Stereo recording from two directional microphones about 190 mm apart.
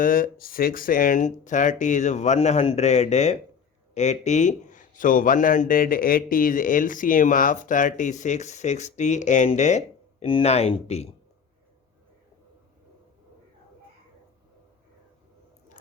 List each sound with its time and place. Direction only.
0.0 s speech: 50° left (ahead or behind)